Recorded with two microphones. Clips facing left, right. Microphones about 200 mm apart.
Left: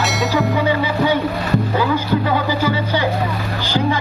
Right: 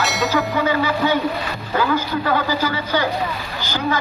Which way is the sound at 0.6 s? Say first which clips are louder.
Left 2 dB; 30° left (ahead or behind).